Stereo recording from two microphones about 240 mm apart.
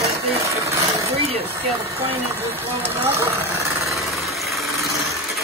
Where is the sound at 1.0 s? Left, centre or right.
Right.